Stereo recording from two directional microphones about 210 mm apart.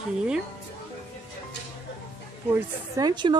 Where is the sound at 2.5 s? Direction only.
20° right (ahead or behind).